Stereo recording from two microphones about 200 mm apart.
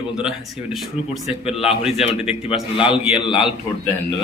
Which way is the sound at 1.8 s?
30° left (ahead or behind).